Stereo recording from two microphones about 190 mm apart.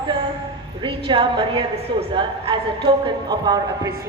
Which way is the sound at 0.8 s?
25° right (ahead or behind).